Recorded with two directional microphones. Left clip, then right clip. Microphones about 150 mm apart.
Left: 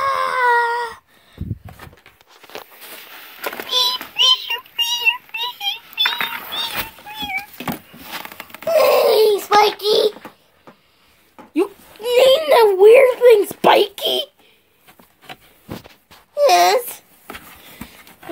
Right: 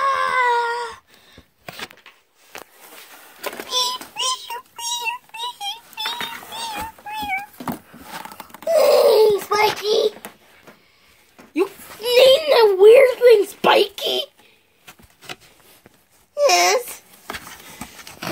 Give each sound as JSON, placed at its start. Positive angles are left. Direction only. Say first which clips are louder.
{"t": 0.0, "sound": "a sound", "louder": "left 1 dB", "side_deg": 0}
{"t": 3.3, "sound": "a sound", "louder": "left 3 dB", "side_deg": -15}
{"t": 3.6, "sound": "child singing", "louder": "left 4 dB", "side_deg": 0}
{"t": 4.7, "sound": "cat", "louder": "left 8 dB", "side_deg": 0}
{"t": 6.0, "sound": "synthetic singing", "louder": "left 5 dB", "side_deg": -25}
{"t": 7.1, "sound": "cat", "louder": "right 3 dB", "side_deg": -5}
{"t": 7.5, "sound": "cat", "louder": "left 2 dB", "side_deg": -35}
{"t": 8.2, "sound": "a sound", "louder": "right 1 dB", "side_deg": -10}
{"t": 8.7, "sound": "laughter", "louder": "even", "side_deg": 0}
{"t": 9.6, "sound": "child singing", "louder": "left 3 dB", "side_deg": 20}
{"t": 11.5, "sound": "a sound", "louder": "left 2 dB", "side_deg": 0}
{"t": 16.3, "sound": "babbling", "louder": "left 3 dB", "side_deg": 5}